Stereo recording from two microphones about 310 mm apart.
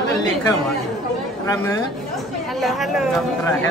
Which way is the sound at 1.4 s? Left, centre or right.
Centre.